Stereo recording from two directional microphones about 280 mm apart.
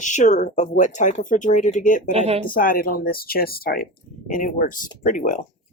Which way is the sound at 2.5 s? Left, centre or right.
Left.